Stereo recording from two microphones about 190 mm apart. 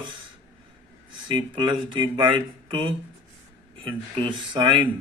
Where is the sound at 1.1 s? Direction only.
25° right (ahead or behind).